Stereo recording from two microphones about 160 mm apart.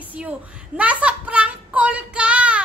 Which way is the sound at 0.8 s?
10° right (ahead or behind).